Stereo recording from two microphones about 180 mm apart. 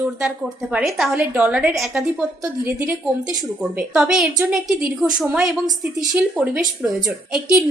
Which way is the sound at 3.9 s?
5° right (ahead or behind).